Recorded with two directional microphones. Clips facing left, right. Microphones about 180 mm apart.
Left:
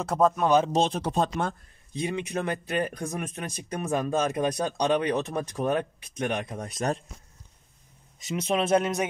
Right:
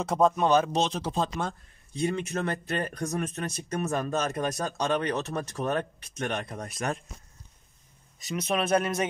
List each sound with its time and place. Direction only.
0.0 s speech: 5° left (ahead or behind)
0.7 s speech: 55° left (ahead or behind)
2.0 s speech: 15° left (ahead or behind)
8.2 s speech: 25° left (ahead or behind)